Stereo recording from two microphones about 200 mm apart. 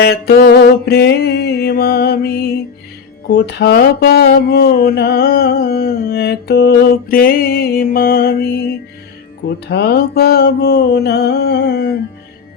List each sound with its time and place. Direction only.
0.0 s mantra: 50° left (ahead or behind)
9.6 s mantra: 55° left (ahead or behind)